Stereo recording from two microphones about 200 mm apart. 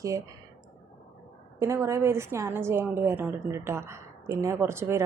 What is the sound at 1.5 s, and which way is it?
A woman's voice, 15° right (ahead or behind).